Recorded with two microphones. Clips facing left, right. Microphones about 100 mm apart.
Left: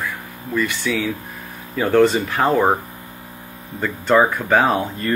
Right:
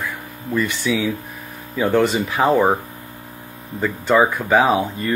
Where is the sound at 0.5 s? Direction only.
20° right (ahead or behind).